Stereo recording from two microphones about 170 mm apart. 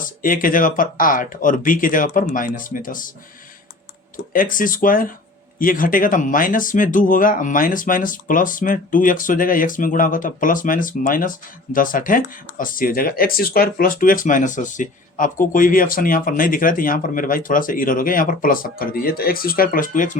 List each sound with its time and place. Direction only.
0.0 s speech: 55° left (ahead or behind)
4.3 s speech: 55° left (ahead or behind)